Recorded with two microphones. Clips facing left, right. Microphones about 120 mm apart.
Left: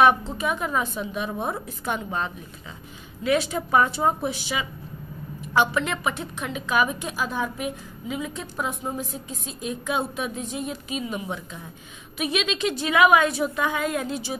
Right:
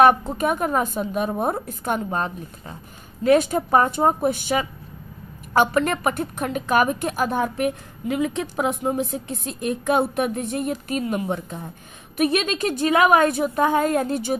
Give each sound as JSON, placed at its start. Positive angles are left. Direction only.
{"t": 0.0, "sound": "a woman's voice", "side_deg": -50}